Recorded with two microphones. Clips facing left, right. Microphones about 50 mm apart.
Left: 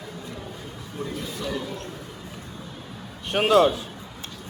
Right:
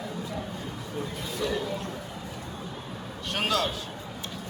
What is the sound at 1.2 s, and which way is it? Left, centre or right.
Speech, centre.